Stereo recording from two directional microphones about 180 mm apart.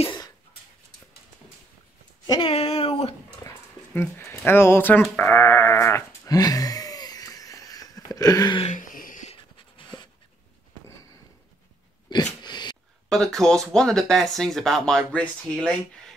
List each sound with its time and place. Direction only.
0.0 s a sound: 25° left (ahead or behind)
2.2 s speech: 20° left (ahead or behind)
2.5 s a sound: 35° left (ahead or behind)
4.5 s sheep: 15° left (ahead or behind)
8.6 s writing: 45° left (ahead or behind); by 10.0 s 30° left (ahead or behind)
12.1 s dog: 25° left (ahead or behind)
13.1 s speech: centre (ahead or behind)